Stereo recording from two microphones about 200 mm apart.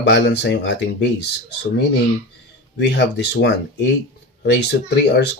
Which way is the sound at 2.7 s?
60° left (ahead or behind).